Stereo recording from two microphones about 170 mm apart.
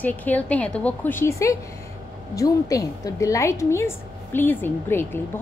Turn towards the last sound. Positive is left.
turn(degrees=15)  # may be behind; listen again after turning